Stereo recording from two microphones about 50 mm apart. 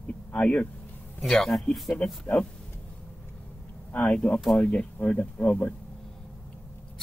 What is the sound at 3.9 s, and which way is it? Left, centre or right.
A man's voice, left.